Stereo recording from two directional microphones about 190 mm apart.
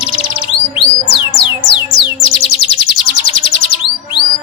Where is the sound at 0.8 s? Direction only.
30° left (ahead or behind).